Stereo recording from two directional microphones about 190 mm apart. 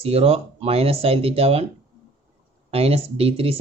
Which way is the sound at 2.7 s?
30° right (ahead or behind).